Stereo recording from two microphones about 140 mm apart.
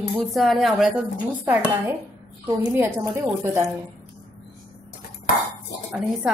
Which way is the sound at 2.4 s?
15° right (ahead or behind).